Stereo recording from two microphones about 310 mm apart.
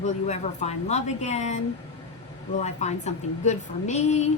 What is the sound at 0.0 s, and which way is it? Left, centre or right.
A woman's voice, left.